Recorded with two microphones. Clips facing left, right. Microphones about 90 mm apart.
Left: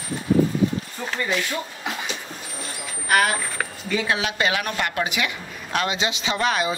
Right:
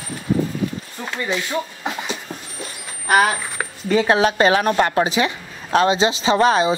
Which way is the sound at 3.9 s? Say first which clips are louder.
Right 9 dB; 40° right (ahead or behind).